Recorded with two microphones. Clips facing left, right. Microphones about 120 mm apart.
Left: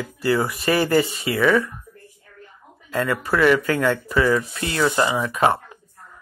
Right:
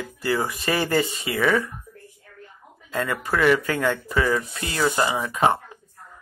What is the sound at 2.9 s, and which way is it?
Speech, 20° right (ahead or behind).